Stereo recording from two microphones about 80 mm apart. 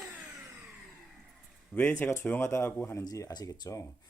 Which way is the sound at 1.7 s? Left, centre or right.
Centre.